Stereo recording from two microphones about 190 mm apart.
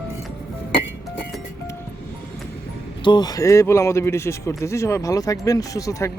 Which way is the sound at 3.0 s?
20° left (ahead or behind).